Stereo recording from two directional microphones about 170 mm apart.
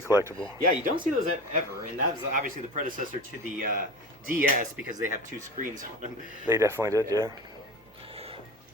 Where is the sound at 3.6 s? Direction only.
55° right (ahead or behind).